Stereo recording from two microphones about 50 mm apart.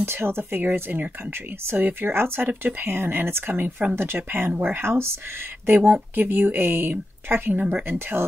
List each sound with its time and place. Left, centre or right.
0.0 s speech: right
5.9 s speech: right